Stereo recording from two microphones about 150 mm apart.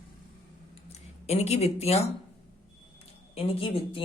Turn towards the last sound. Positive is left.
turn(degrees=40)  # may be behind; listen again after turning